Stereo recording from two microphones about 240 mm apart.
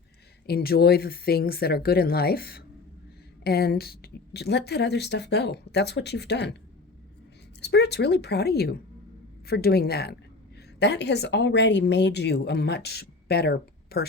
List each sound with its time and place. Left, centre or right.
0.4 s a woman's voice: left
7.6 s a woman's voice: left